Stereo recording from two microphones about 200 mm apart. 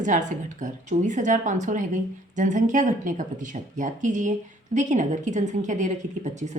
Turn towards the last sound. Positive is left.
turn(degrees=-35)  # may be behind; listen again after turning